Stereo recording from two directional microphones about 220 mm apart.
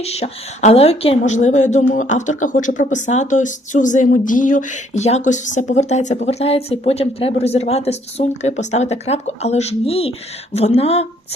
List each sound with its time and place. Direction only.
0.0 s speech: 30° left (ahead or behind)